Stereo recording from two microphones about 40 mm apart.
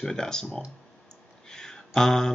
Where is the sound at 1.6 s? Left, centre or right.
Centre.